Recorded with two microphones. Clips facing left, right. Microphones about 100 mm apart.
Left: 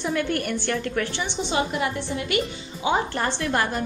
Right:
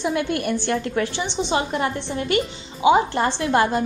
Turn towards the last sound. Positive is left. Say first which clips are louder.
# right 5 dB
turn(degrees=-20)  # may be behind; listen again after turning